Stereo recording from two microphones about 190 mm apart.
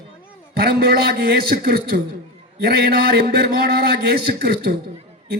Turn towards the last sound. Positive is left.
turn(degrees=-55)  # may be behind; listen again after turning